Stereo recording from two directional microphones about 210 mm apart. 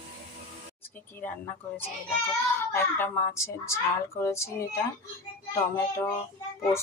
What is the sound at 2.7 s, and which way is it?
Speech, 10° left (ahead or behind).